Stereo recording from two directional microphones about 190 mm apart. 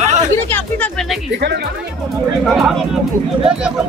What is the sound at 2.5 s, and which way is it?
Speech, centre (ahead or behind).